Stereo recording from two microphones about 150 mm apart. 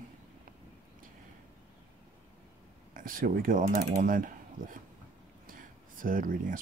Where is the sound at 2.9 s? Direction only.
70° right (ahead or behind).